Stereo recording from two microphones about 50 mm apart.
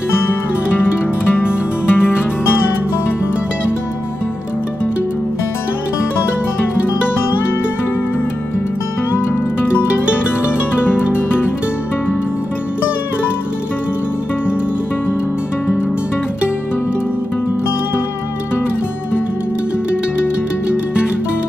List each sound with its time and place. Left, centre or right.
1.3 s music: left